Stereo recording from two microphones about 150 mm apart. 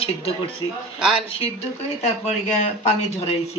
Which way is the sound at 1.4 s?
45° left (ahead or behind).